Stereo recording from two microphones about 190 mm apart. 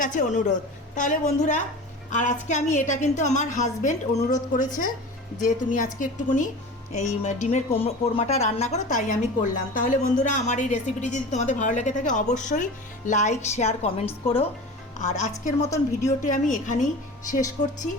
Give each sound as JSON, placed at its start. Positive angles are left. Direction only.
{"t": 0.0, "sound": "a woman's voice", "side_deg": 40}